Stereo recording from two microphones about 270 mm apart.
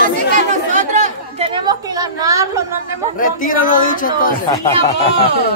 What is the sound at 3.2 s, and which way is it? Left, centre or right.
Speech, left.